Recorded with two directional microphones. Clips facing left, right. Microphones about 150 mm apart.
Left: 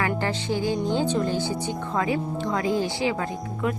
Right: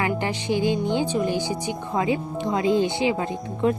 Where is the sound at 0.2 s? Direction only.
15° right (ahead or behind).